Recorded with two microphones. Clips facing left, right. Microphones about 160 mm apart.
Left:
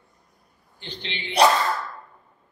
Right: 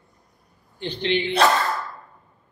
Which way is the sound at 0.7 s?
60° right (ahead or behind).